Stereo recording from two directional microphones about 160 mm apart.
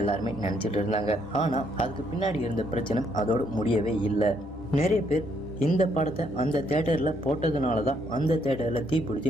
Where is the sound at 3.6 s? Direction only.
35° left (ahead or behind).